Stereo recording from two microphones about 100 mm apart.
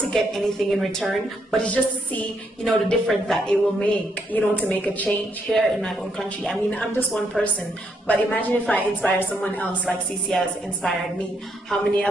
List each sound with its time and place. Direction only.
0.1 s a woman's voice: 5° left (ahead or behind)
5.5 s a woman's voice: 5° left (ahead or behind)
8.1 s a woman's voice: 15° left (ahead or behind)
9.8 s a woman's voice: 5° left (ahead or behind)